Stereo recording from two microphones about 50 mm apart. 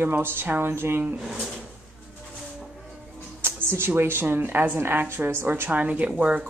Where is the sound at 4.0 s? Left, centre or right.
Right.